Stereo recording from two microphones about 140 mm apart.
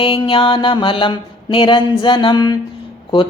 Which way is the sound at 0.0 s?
40° left (ahead or behind).